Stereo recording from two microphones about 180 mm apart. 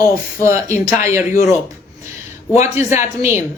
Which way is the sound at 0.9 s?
15° right (ahead or behind).